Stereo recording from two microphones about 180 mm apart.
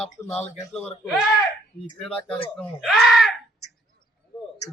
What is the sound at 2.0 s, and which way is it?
Speech, 5° left (ahead or behind).